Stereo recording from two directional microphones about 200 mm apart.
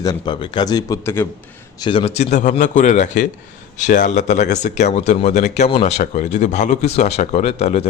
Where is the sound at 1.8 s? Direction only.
25° left (ahead or behind).